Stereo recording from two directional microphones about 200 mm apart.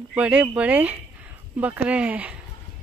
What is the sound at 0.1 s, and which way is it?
Speech, 5° right (ahead or behind).